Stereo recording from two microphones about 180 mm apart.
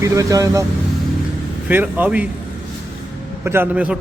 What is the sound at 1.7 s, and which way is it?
Speech, 10° right (ahead or behind).